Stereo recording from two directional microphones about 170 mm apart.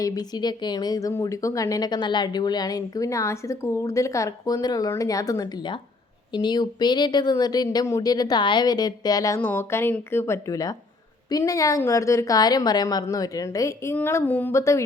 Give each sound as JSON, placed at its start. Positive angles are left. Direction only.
{"t": 0.0, "sound": "a woman's voice", "side_deg": 20}